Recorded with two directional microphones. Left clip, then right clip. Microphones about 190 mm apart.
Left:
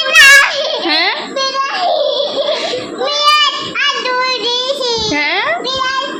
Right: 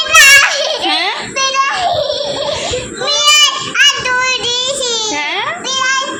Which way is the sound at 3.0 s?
10° left (ahead or behind).